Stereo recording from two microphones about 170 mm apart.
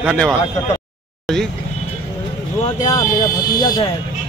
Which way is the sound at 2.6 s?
25° left (ahead or behind).